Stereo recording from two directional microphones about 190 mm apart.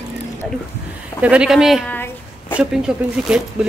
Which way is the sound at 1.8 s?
10° left (ahead or behind).